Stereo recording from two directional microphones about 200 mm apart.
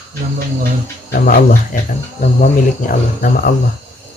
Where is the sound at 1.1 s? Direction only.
45° left (ahead or behind).